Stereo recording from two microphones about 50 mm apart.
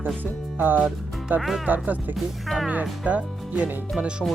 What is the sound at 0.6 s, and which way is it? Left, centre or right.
Speech, right.